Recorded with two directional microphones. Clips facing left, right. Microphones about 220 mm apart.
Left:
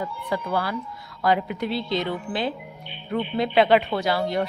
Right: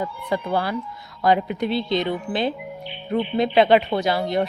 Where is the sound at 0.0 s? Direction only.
25° right (ahead or behind).